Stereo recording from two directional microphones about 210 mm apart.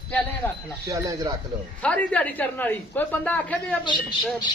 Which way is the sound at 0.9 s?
15° right (ahead or behind).